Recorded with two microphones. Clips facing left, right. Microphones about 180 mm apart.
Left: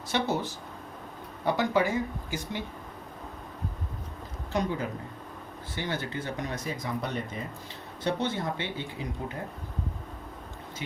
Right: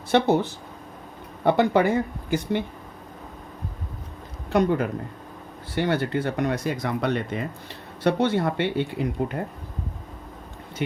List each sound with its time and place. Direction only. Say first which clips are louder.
0.1 s speech: right 9 dB; 60° right (ahead or behind)
4.5 s speech: right 8 dB; 60° right (ahead or behind)